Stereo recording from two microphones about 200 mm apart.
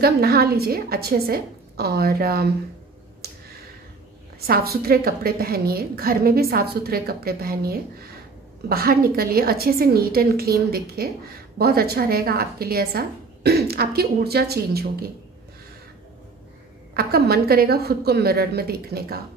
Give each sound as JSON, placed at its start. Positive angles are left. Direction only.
{"t": 0.0, "sound": "a woman's voice", "side_deg": -50}
{"t": 3.2, "sound": "a sound", "side_deg": -50}
{"t": 4.5, "sound": "a woman's voice", "side_deg": -50}
{"t": 16.9, "sound": "a woman's voice", "side_deg": -50}